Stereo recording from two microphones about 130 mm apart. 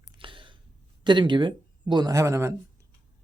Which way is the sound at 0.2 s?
40° right (ahead or behind).